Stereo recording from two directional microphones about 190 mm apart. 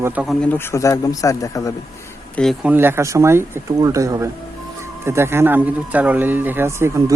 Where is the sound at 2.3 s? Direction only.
Centre (ahead or behind).